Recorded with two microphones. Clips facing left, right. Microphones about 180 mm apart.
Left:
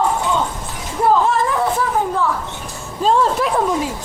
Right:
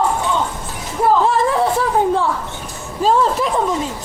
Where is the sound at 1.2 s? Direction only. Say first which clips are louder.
Right 2 dB; 30° right (ahead or behind).